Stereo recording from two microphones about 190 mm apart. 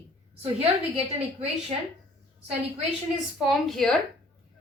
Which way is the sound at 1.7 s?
30° right (ahead or behind).